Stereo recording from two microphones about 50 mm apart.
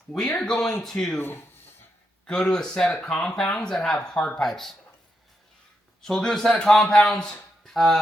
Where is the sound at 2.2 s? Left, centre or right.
Centre.